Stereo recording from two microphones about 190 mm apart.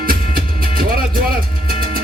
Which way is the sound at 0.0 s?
50° right (ahead or behind).